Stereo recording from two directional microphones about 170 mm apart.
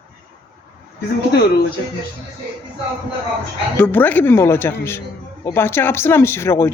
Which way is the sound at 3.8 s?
10° left (ahead or behind).